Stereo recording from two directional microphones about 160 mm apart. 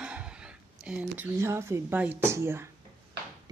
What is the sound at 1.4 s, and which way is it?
Speech, 15° right (ahead or behind).